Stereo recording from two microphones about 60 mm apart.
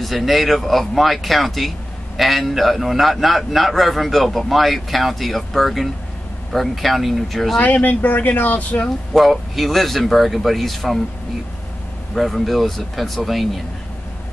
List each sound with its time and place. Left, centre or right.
0.0 s a man's voice: centre
7.6 s speech: left
9.1 s a man's voice: centre
12.2 s a man's voice: centre